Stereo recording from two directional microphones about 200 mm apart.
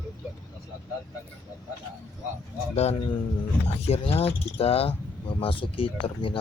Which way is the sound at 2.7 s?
30° left (ahead or behind).